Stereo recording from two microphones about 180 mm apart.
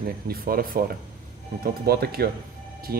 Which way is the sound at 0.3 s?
55° right (ahead or behind).